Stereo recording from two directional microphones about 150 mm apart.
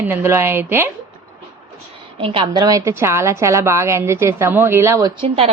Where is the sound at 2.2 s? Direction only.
35° right (ahead or behind); by 5.1 s 20° right (ahead or behind).